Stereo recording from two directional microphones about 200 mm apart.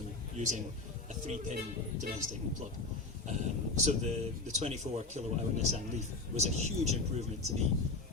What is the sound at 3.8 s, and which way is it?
A man's voice, 35° right (ahead or behind).